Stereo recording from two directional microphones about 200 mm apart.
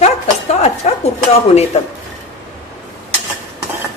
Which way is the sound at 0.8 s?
35° left (ahead or behind).